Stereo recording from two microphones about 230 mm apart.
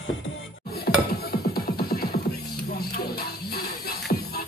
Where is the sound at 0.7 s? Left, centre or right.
Left.